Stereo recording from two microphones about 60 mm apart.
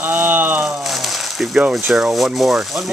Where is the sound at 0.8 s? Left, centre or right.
Centre.